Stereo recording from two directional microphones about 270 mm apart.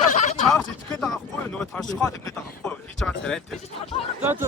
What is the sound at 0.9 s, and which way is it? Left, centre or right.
Speech, centre.